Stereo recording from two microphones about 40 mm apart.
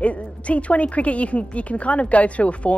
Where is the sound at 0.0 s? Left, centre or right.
Left.